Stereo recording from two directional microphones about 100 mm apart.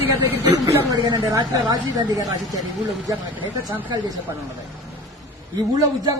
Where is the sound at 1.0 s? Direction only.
50° right (ahead or behind).